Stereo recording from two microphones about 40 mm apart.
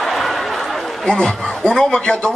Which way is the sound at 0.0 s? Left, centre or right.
Centre.